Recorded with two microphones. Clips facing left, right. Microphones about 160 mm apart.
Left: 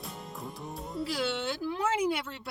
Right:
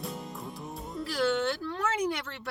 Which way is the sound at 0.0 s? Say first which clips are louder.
Right 3 dB; centre (ahead or behind).